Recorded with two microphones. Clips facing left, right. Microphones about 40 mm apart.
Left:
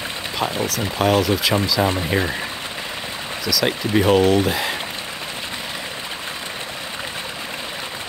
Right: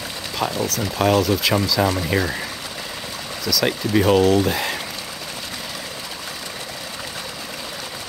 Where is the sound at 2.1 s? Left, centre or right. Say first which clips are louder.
Even; centre.